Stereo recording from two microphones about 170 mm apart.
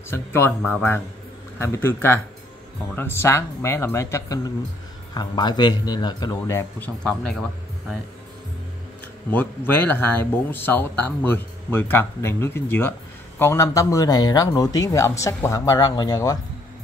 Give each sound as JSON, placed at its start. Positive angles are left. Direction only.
{"t": 0.1, "sound": "speech", "side_deg": 15}
{"t": 6.8, "sound": "speech", "side_deg": 5}
{"t": 9.3, "sound": "speech", "side_deg": 10}